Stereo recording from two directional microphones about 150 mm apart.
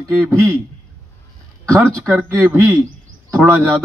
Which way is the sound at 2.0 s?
20° right (ahead or behind).